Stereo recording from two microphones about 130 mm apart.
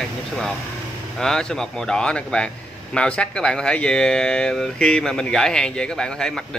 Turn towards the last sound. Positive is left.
turn(degrees=5)  # may be behind; listen again after turning